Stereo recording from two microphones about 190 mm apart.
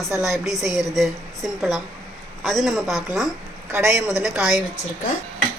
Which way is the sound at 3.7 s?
15° right (ahead or behind).